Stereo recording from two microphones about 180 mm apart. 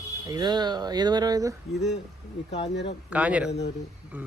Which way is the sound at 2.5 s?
75° left (ahead or behind).